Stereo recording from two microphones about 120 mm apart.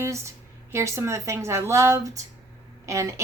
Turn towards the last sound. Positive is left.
turn(degrees=-25)  # may be behind; listen again after turning